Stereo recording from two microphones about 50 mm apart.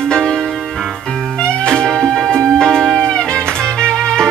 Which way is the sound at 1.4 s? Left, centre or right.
Centre.